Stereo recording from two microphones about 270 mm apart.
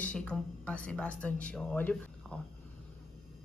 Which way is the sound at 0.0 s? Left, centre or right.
Centre.